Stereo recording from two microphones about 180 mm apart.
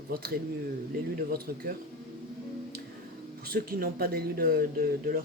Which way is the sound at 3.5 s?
55° right (ahead or behind).